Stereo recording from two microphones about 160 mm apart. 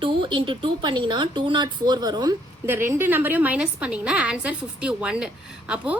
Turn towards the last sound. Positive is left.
turn(degrees=-5)  # may be behind; listen again after turning